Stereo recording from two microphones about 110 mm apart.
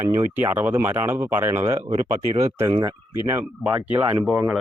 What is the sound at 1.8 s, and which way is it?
Speech, 75° right (ahead or behind).